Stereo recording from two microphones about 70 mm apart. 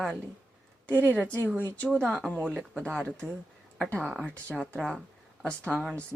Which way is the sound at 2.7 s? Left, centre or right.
Centre.